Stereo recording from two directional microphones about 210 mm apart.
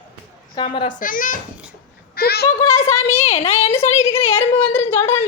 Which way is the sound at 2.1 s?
50° left (ahead or behind).